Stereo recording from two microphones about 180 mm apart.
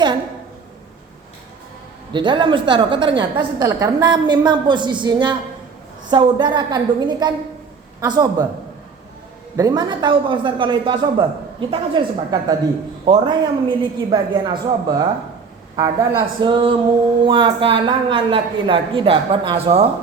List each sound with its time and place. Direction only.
2.1 s a woman's voice: 25° right (ahead or behind)
9.6 s a woman's voice: 20° right (ahead or behind)